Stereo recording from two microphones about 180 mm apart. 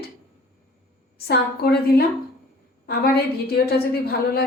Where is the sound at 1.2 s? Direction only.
60° left (ahead or behind).